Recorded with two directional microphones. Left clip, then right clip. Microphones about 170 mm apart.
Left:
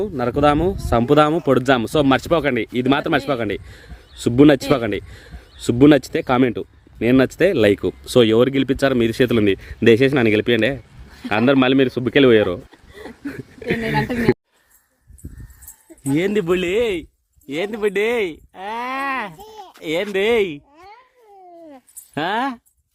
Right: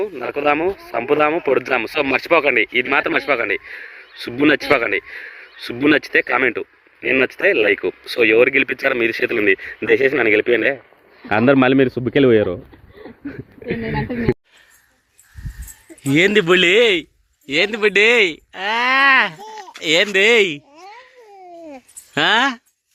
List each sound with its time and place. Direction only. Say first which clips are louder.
0.0 s a man's voice: left 2 dB; 20° left (ahead or behind)
13.2 s chuckle: left 1 dB; 20° left (ahead or behind)
13.7 s speech: left 3 dB; 30° left (ahead or behind)
16.0 s a man's voice: right 5 dB; 10° left (ahead or behind)
22.1 s speech: right 6 dB; 10° left (ahead or behind)